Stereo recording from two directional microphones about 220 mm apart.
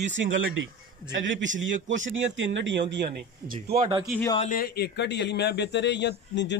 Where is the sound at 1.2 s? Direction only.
55° right (ahead or behind).